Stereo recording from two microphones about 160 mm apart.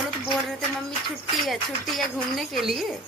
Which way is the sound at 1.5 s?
Centre (ahead or behind).